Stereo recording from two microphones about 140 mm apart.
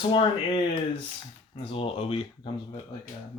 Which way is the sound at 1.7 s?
40° left (ahead or behind).